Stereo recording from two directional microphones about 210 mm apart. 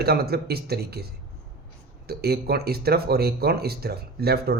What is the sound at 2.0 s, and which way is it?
Speech, 50° right (ahead or behind).